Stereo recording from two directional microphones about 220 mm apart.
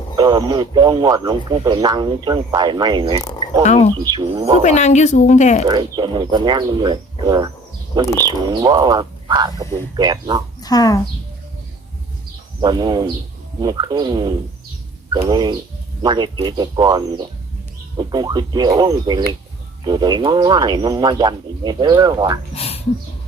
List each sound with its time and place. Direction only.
0.2 s a man's voice: 20° right (ahead or behind)
3.2 s a sound: 20° left (ahead or behind)
3.6 s a woman's voice: 30° left (ahead or behind)
4.1 s a man's voice: 20° right (ahead or behind)
4.6 s a woman's voice: 30° left (ahead or behind)
5.6 s a man's voice: 20° right (ahead or behind)
10.6 s speech: 15° left (ahead or behind)
12.6 s a man's voice: 20° right (ahead or behind)
22.5 s a sound: 25° left (ahead or behind)